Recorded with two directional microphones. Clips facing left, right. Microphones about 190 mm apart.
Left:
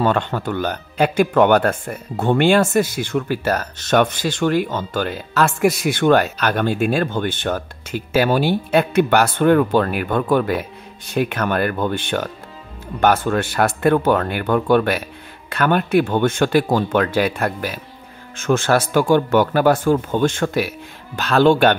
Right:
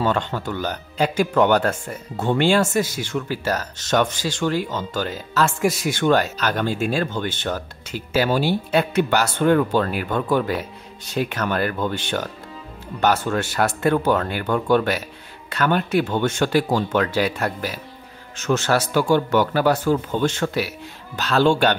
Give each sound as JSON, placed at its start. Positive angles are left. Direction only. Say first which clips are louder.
{"t": 0.0, "sound": "speech", "louder": "left 3 dB", "side_deg": 55}